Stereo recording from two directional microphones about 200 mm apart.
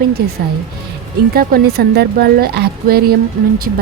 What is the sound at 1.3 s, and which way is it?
A woman's voice, 50° right (ahead or behind).